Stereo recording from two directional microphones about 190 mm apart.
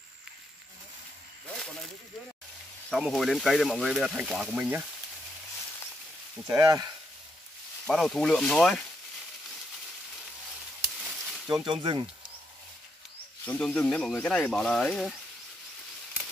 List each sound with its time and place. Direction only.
2.9 s speech: centre (ahead or behind)
6.6 s speech: 20° right (ahead or behind)
7.8 s speech: centre (ahead or behind)
11.0 s a sound: centre (ahead or behind)
11.6 s speech: 25° right (ahead or behind)
13.5 s speech: 5° left (ahead or behind)